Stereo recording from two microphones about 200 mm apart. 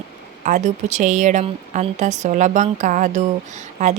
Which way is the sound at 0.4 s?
40° right (ahead or behind).